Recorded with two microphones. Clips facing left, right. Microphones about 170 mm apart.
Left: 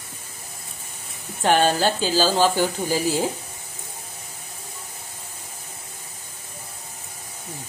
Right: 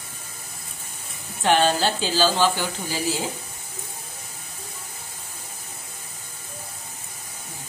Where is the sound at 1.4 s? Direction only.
45° left (ahead or behind).